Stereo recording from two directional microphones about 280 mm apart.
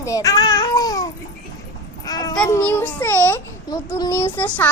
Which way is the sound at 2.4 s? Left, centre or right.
Centre.